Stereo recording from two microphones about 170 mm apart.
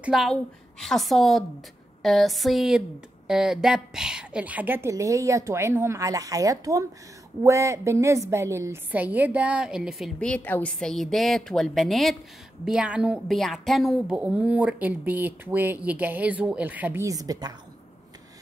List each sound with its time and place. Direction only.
0.0 s a woman's voice: centre (ahead or behind); by 17.6 s 20° right (ahead or behind)